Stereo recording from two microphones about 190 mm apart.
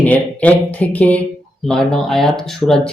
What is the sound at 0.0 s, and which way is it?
Speech, 10° left (ahead or behind).